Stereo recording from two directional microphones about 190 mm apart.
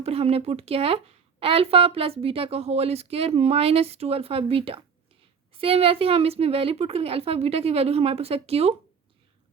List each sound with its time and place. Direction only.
0.0 s a woman's voice: 30° right (ahead or behind)